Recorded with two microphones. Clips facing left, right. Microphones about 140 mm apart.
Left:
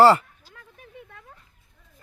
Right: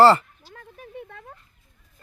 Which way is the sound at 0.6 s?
40° right (ahead or behind).